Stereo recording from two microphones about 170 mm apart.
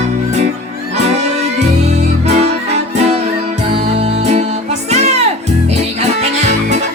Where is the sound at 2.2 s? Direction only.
40° right (ahead or behind).